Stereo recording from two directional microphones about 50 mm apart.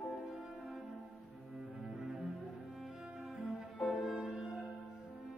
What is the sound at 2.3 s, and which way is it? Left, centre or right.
Music, centre.